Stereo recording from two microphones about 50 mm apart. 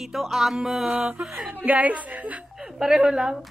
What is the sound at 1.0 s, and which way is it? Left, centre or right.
Speech, centre.